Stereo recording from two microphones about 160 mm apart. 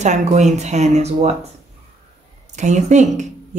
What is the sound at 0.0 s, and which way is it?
Speech, 45° right (ahead or behind).